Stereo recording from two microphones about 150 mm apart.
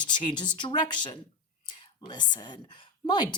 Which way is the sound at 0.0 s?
30° left (ahead or behind).